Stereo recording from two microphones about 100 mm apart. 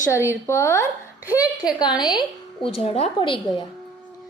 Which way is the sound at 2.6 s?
80° left.